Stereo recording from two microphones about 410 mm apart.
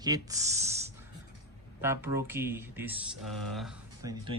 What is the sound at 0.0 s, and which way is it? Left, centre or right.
Speech, centre.